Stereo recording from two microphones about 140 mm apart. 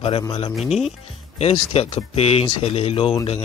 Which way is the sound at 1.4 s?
45° left (ahead or behind).